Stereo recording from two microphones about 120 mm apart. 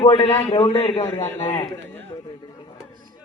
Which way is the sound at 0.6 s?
65° left (ahead or behind).